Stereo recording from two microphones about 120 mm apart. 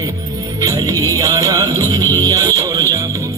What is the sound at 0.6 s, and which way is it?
Music, 30° right (ahead or behind).